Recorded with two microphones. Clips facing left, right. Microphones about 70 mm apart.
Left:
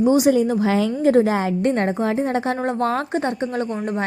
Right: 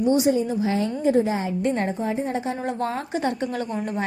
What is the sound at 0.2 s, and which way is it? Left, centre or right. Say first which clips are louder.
A woman's voice: left 4 dB; left.